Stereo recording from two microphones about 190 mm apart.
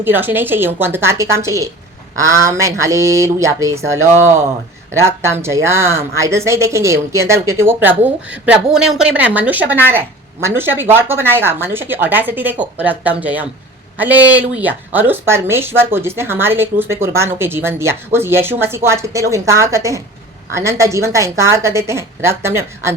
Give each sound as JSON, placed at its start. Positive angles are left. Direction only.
{"t": 0.0, "sound": "speech", "side_deg": -10}